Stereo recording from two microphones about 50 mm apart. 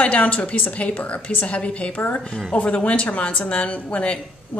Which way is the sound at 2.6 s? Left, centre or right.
Left.